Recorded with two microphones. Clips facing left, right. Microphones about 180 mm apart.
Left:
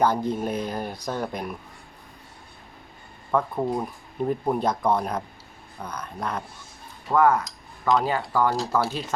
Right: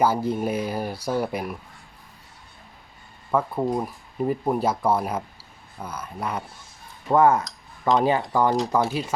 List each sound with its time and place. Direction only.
0.0 s speech: 5° right (ahead or behind)
3.3 s speech: 5° right (ahead or behind)
7.1 s speech: 25° right (ahead or behind)